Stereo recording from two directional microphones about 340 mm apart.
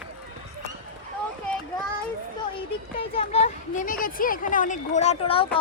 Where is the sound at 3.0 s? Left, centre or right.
Centre.